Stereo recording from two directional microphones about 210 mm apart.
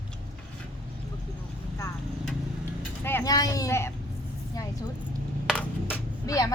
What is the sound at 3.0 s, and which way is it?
Speech, 15° left (ahead or behind).